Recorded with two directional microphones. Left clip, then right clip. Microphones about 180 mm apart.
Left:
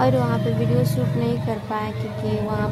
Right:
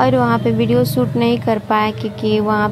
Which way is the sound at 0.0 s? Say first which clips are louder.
Right 6 dB; 35° right (ahead or behind).